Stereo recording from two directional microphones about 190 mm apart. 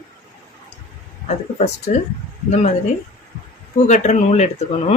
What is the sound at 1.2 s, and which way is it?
Speech, 35° left (ahead or behind).